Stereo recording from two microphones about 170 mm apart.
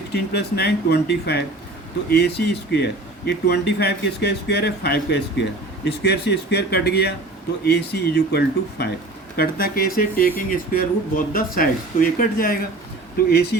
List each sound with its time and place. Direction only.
0.1 s speech: 75° left (ahead or behind); by 12.5 s 55° left (ahead or behind)
13.1 s speech: 70° left (ahead or behind)